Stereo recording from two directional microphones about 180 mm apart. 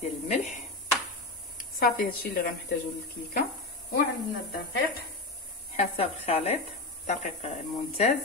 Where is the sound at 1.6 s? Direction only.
50° left (ahead or behind).